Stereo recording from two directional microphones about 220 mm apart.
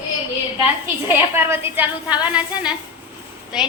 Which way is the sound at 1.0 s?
10° right (ahead or behind).